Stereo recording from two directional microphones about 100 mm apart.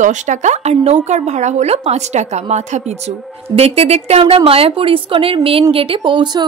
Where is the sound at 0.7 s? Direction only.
90° right.